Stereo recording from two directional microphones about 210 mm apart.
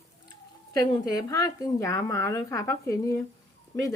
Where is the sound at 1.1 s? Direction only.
20° left (ahead or behind).